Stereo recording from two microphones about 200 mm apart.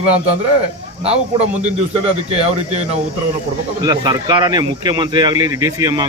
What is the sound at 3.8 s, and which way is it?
Speech, 20° right (ahead or behind).